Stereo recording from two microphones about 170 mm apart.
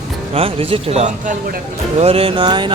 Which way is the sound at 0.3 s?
35° right (ahead or behind).